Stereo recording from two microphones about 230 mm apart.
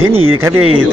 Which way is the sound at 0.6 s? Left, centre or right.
Right.